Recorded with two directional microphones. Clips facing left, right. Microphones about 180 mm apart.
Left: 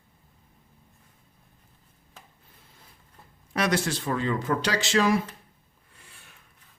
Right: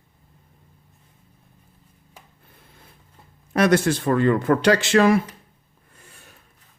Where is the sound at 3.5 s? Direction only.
50° right (ahead or behind).